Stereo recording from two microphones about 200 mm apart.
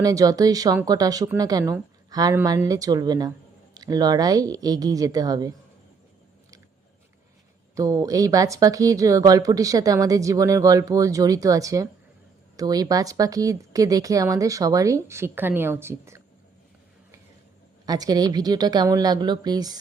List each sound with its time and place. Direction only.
0.0 s a woman's voice: 15° right (ahead or behind)
7.8 s a woman's voice: 15° right (ahead or behind)
17.8 s a woman's voice: 20° right (ahead or behind)